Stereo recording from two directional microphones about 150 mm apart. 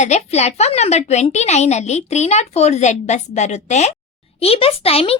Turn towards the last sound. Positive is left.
turn(degrees=40)  # may be behind; listen again after turning